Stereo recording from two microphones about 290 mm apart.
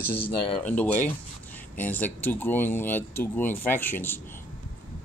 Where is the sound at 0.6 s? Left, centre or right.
Centre.